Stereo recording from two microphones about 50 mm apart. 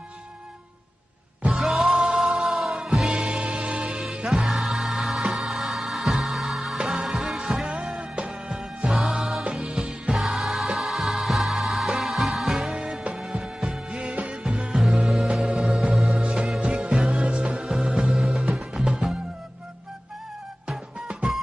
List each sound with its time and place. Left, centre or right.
1.5 s music: centre
7.9 s music: right
8.3 s music: centre
9.7 s music: centre
10.0 s music: centre
12.7 s music: centre
18.1 s music: centre